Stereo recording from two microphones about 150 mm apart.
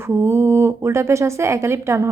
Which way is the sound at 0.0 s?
15° right (ahead or behind).